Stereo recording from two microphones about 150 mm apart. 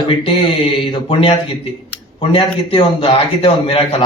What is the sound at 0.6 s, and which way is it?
A man's voice, 35° left (ahead or behind).